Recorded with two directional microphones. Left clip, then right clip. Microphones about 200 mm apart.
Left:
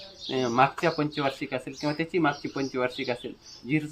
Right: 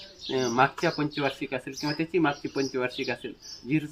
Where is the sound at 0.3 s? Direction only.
15° left (ahead or behind).